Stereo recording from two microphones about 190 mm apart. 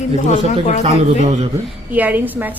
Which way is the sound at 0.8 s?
40° right (ahead or behind).